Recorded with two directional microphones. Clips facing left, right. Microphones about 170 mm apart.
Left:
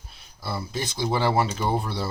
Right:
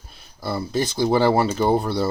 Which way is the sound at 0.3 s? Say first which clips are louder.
Right 7 dB; 50° right (ahead or behind).